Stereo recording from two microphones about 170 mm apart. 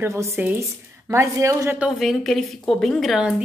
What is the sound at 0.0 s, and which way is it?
A woman's voice, 15° right (ahead or behind).